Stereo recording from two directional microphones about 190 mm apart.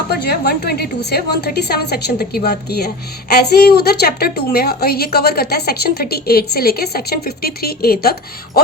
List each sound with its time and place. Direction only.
0.1 s a woman's voice: 60° left (ahead or behind)